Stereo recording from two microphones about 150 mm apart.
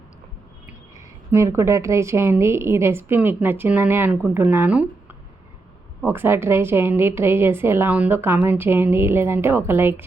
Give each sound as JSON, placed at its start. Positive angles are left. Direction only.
{"t": 0.9, "sound": "a woman's voice", "side_deg": -20}